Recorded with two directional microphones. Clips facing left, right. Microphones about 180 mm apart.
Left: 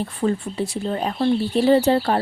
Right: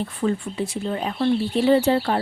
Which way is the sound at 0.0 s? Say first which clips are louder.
Left 1 dB; 35° left (ahead or behind).